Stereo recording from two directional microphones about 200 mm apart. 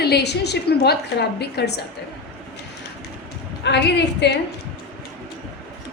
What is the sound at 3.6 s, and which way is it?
Speech, 60° left (ahead or behind).